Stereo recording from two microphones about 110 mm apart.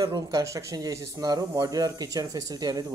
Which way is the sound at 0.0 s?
35° right (ahead or behind).